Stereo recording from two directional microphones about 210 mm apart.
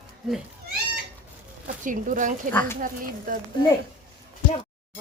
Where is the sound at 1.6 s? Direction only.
40° right (ahead or behind).